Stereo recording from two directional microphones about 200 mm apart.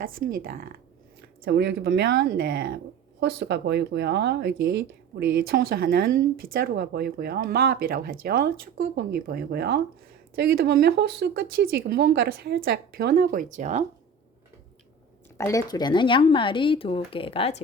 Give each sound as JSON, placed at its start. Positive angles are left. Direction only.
{"t": 0.0, "sound": "speech", "side_deg": -45}
{"t": 15.4, "sound": "speech", "side_deg": 15}